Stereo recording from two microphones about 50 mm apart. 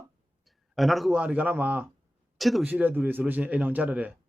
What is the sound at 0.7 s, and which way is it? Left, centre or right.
Speech, centre.